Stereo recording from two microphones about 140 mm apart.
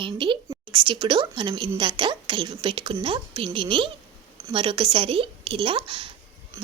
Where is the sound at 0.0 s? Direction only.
35° right (ahead or behind).